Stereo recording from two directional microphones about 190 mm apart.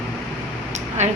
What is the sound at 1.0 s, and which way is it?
Speech, 35° right (ahead or behind).